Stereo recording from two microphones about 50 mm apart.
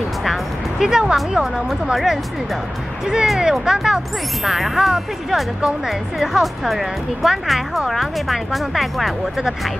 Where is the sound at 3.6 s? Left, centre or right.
Centre.